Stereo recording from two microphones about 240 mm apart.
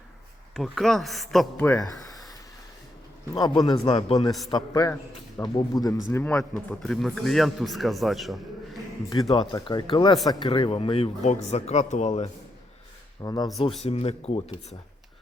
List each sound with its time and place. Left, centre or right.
0.5 s a man's voice: centre
3.3 s a man's voice: centre
9.0 s speech: centre
13.2 s speech: centre